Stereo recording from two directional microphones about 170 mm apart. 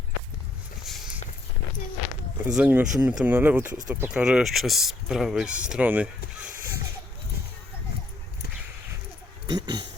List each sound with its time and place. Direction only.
2.6 s speech: 5° right (ahead or behind)
9.5 s speech: 25° right (ahead or behind)